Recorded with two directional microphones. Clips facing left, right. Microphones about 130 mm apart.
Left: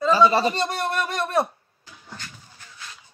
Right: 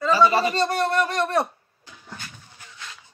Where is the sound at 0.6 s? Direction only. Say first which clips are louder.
Right 4 dB; 15° left (ahead or behind).